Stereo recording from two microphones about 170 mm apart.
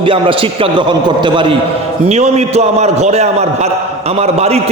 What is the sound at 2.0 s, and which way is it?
A man's voice, 40° right (ahead or behind).